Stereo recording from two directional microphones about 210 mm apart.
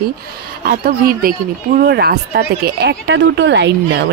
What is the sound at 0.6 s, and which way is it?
Speech, 45° right (ahead or behind).